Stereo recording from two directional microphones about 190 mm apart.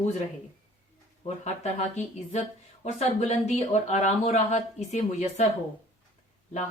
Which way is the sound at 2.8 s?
35° left (ahead or behind).